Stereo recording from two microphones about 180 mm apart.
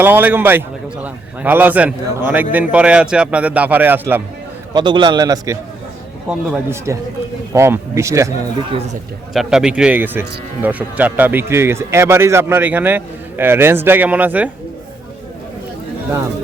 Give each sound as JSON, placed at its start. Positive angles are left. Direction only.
{"t": 0.0, "sound": "speech", "side_deg": -10}
{"t": 4.7, "sound": "a man's voice", "side_deg": -25}
{"t": 6.2, "sound": "speech", "side_deg": -10}
{"t": 9.3, "sound": "speech", "side_deg": 0}